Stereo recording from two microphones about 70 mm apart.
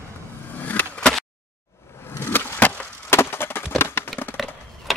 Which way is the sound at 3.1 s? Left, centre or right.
Left.